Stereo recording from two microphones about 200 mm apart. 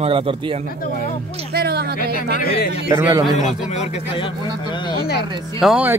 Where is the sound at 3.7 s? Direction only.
35° left (ahead or behind).